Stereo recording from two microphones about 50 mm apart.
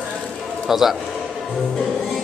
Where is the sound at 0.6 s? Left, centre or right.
Centre.